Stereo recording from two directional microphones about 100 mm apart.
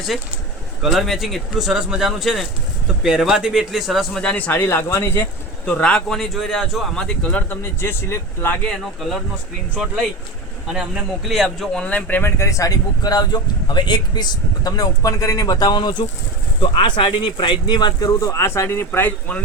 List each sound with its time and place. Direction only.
0.8 s speech: centre (ahead or behind); by 5.3 s 25° left (ahead or behind)
5.6 s speech: 10° left (ahead or behind)
10.7 s speech: 5° right (ahead or behind)
11.7 s speech: 10° left (ahead or behind)
12.4 s speech: 35° left (ahead or behind)